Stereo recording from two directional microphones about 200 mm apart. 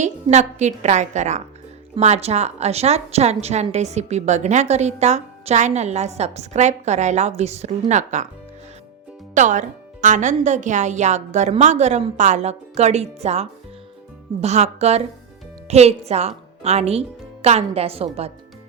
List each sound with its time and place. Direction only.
0.0 s a woman's voice: 35° right (ahead or behind)
9.3 s a woman's voice: 40° right (ahead or behind)